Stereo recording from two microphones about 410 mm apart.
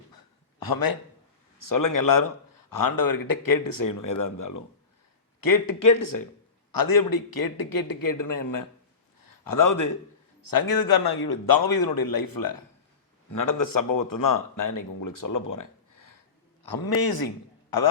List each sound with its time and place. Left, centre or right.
0.6 s a man's voice: left
16.6 s a man's voice: left